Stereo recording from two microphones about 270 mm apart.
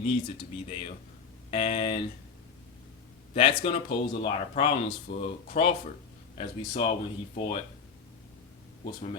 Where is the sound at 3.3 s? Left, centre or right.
Left.